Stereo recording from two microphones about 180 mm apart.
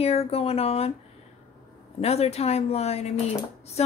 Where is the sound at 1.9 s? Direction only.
35° left (ahead or behind).